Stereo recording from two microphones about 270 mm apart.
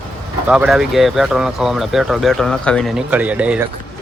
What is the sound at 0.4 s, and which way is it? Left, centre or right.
Speech, centre.